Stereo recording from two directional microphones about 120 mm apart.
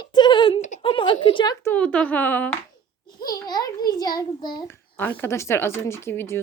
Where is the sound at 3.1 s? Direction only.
35° left (ahead or behind).